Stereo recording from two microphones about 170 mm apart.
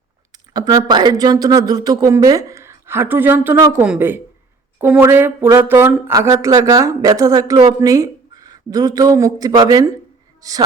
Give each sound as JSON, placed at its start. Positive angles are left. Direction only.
{"t": 0.5, "sound": "speech", "side_deg": -20}